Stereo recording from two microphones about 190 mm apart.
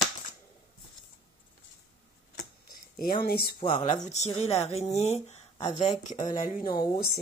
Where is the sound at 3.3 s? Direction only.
55° left (ahead or behind).